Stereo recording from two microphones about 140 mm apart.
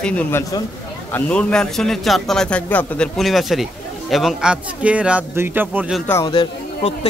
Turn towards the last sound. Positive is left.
turn(degrees=40)  # may be behind; listen again after turning